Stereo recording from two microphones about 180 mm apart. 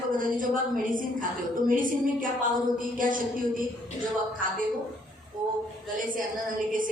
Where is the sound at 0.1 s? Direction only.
50° right (ahead or behind).